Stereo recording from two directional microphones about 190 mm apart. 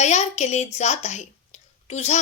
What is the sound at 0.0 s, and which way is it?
A woman's voice, 35° left (ahead or behind).